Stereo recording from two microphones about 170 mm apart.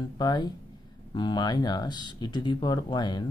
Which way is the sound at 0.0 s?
25° left (ahead or behind).